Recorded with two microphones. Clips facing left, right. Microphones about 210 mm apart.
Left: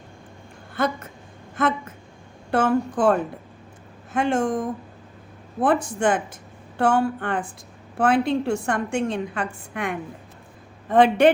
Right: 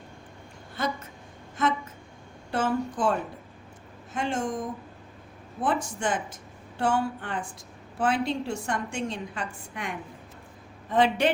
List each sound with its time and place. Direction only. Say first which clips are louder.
0.8 s a woman's voice: left 6 dB; 55° left (ahead or behind)
2.5 s a woman's voice: left 6 dB; 55° left (ahead or behind)
5.6 s a woman's voice: left 7 dB; 55° left (ahead or behind)